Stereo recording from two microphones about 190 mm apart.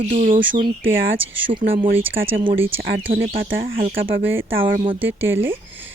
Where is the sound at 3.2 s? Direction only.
50° right (ahead or behind).